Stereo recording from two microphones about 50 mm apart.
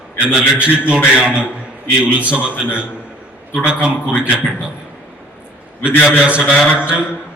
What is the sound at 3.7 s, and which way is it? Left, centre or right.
Speech, right.